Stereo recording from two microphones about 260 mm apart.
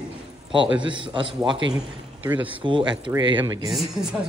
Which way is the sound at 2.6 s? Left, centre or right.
Centre.